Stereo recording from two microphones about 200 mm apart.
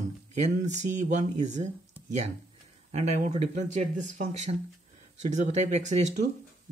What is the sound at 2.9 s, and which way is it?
Speech, 35° right (ahead or behind).